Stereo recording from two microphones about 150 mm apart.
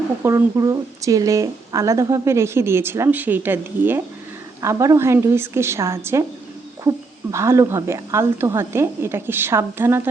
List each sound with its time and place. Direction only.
0.2 s a woman's voice: 20° right (ahead or behind)